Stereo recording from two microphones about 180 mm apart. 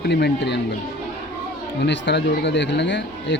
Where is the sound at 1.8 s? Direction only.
75° left (ahead or behind).